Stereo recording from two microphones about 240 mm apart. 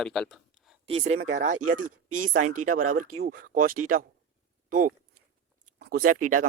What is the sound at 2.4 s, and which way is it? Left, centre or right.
Speech, right.